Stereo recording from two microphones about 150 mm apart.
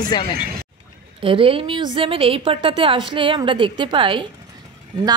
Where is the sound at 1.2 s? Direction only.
35° right (ahead or behind).